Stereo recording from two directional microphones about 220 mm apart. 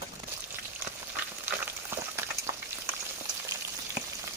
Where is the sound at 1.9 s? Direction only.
10° right (ahead or behind).